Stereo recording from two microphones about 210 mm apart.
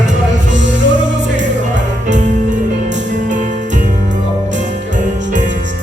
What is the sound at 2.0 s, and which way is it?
Music, 35° right (ahead or behind).